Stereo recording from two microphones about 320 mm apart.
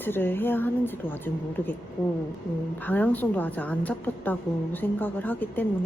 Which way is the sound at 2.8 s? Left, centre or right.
Centre.